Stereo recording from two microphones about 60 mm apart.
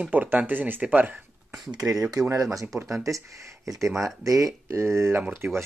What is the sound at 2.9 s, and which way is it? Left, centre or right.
Speech, right.